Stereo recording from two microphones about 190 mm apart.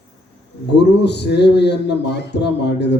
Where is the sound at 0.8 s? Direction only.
60° left (ahead or behind).